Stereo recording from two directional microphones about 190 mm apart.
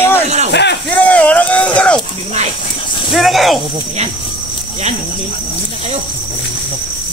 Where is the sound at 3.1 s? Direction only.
Centre (ahead or behind).